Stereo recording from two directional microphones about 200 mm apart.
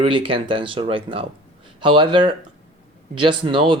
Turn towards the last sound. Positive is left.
turn(degrees=-25)  # may be behind; listen again after turning